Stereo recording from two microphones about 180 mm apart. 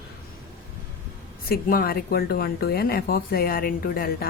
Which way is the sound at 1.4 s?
55° left (ahead or behind).